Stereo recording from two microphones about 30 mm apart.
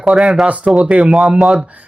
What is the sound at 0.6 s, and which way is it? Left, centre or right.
Speech, right.